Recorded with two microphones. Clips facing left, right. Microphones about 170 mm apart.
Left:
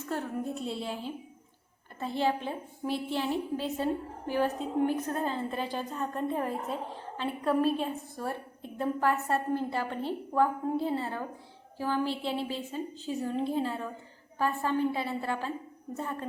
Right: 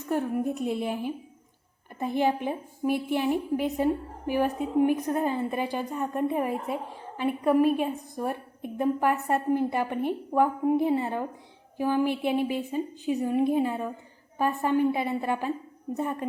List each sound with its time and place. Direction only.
0.0 s a woman's voice: 15° right (ahead or behind)